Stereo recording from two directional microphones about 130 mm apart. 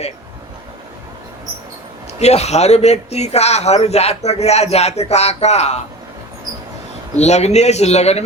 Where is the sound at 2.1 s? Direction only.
55° left (ahead or behind).